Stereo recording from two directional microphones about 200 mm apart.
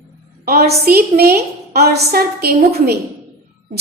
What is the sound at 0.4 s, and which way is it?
A woman's voice, 50° right (ahead or behind).